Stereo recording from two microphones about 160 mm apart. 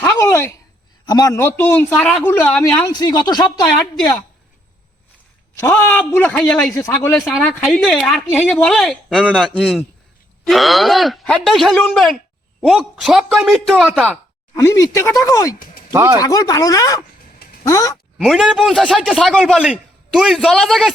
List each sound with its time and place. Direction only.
0.0 s a sound: 15° left (ahead or behind)
1.0 s a man's voice: 20° left (ahead or behind)
2.8 s speech: 25° left (ahead or behind)
5.5 s a man's voice: 15° left (ahead or behind)
6.7 s speech: 20° left (ahead or behind)
7.3 s a man's voice: centre (ahead or behind)
14.5 s speech: 20° left (ahead or behind)
15.5 s a sound: 60° left (ahead or behind)
15.9 s speech: 15° right (ahead or behind)
16.2 s speech: 20° left (ahead or behind)
18.2 s a man's voice: centre (ahead or behind)